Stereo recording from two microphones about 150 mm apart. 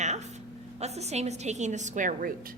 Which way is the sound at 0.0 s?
50° right (ahead or behind).